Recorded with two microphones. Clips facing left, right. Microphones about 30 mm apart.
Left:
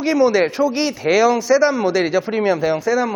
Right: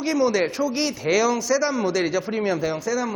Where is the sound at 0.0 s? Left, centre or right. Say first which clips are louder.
Left 6 dB; left.